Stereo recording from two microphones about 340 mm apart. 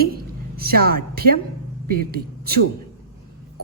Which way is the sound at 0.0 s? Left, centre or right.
Right.